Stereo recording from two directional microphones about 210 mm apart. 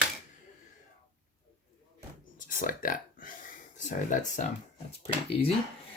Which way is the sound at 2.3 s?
40° left (ahead or behind).